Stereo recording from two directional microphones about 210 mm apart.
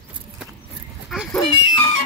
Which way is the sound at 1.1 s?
Centre (ahead or behind).